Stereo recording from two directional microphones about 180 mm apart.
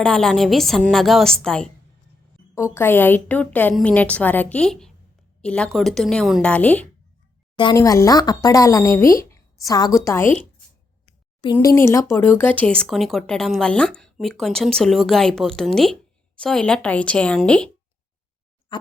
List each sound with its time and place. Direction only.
0.0 s a woman's voice: 5° left (ahead or behind)
7.5 s speech: 25° left (ahead or behind)
11.5 s speech: 15° left (ahead or behind)
18.7 s a sound: 25° left (ahead or behind)